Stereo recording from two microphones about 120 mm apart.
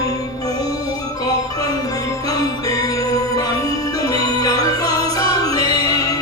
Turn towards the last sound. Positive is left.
turn(degrees=30)  # may be behind; listen again after turning